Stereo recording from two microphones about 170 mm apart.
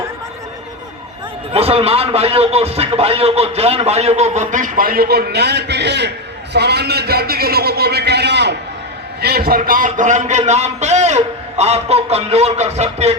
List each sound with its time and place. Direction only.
1.5 s speech: 35° right (ahead or behind); by 6.1 s 90° right
6.5 s a man's voice: 75° right (ahead or behind)
9.2 s speech: 65° right (ahead or behind); by 13.1 s 40° right (ahead or behind)